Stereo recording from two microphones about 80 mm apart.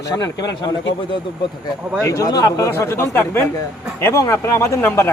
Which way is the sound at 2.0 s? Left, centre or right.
Left.